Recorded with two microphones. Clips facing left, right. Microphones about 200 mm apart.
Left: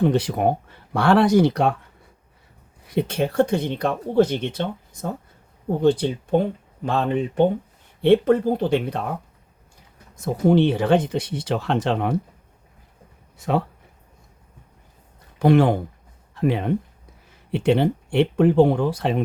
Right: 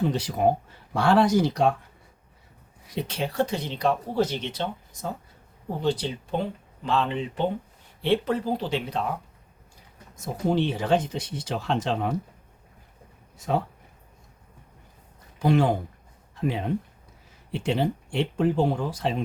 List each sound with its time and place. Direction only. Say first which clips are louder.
0.0 s speech: left 4 dB; 60° left (ahead or behind)
2.8 s speech: left 7 dB; 55° left (ahead or behind)
10.5 s speech: left 6 dB; 60° left (ahead or behind)
15.4 s speech: left 5 dB; 60° left (ahead or behind)